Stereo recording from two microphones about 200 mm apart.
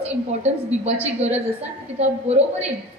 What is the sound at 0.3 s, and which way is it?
A woman's voice, 35° right (ahead or behind).